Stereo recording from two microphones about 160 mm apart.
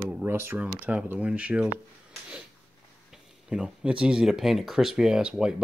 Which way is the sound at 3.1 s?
5° right (ahead or behind).